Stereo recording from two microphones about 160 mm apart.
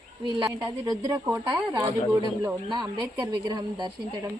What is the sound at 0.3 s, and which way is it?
Speech, 25° right (ahead or behind).